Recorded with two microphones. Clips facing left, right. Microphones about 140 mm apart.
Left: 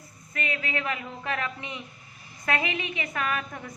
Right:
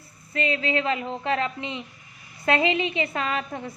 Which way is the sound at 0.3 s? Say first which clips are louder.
Right 6 dB; 30° right (ahead or behind).